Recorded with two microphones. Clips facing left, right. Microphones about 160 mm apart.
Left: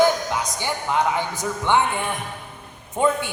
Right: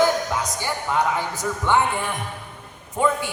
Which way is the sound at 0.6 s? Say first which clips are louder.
Left 1 dB; 20° left (ahead or behind).